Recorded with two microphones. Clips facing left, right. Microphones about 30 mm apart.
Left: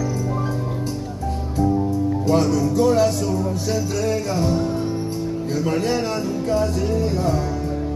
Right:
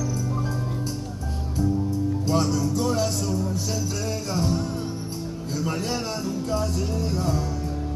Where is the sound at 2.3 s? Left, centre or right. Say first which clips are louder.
Left 5 dB; left.